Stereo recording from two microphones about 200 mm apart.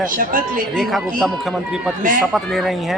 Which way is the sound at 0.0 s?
45° right (ahead or behind).